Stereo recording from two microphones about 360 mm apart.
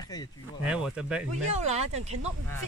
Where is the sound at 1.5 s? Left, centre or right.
Centre.